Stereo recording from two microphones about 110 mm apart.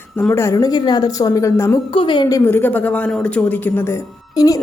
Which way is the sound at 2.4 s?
15° left (ahead or behind).